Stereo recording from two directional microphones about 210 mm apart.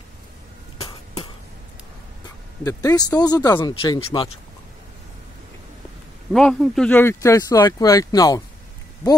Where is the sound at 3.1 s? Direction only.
20° left (ahead or behind).